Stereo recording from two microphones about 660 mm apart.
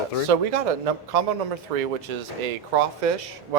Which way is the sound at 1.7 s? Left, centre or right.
Right.